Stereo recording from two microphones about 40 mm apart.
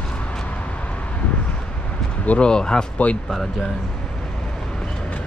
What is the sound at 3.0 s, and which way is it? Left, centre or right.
Speech, left.